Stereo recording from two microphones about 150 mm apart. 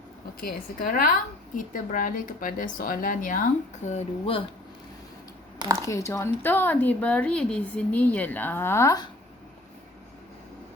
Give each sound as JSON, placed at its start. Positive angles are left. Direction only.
{"t": 0.3, "sound": "a woman's voice", "side_deg": 75}
{"t": 5.8, "sound": "speech", "side_deg": 20}